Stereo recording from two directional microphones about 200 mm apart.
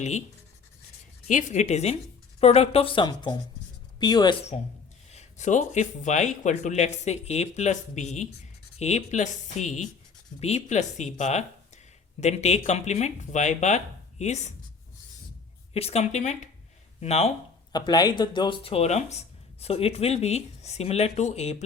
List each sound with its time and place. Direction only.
1.3 s speech: 40° left (ahead or behind)
15.7 s speech: 30° left (ahead or behind)
17.7 s speech: 20° left (ahead or behind)